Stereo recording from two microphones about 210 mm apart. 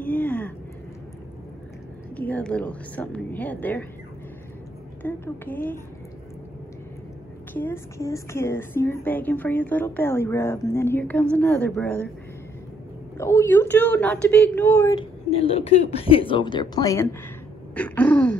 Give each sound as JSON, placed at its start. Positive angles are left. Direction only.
{"t": 0.0, "sound": "a sound", "side_deg": 10}
{"t": 2.1, "sound": "a woman's voice", "side_deg": 5}
{"t": 5.0, "sound": "a woman's voice", "side_deg": 10}
{"t": 7.5, "sound": "a woman's voice", "side_deg": 10}
{"t": 13.2, "sound": "a woman's voice", "side_deg": 15}
{"t": 15.2, "sound": "a woman's voice", "side_deg": 30}